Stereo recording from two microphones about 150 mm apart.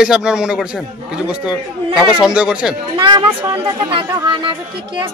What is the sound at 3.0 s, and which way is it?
A woman's voice, 35° right (ahead or behind).